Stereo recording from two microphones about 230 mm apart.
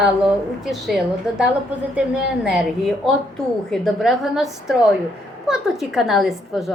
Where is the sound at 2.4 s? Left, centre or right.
Centre.